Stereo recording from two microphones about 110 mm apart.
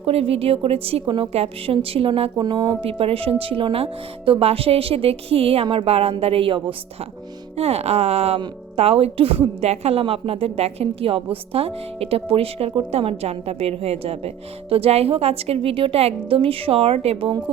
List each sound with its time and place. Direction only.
0.0 s a woman's voice: 65° right (ahead or behind)
2.4 s speech: 40° right (ahead or behind)
2.8 s a woman's voice: 60° right (ahead or behind)
7.5 s a woman's voice: 70° right (ahead or behind)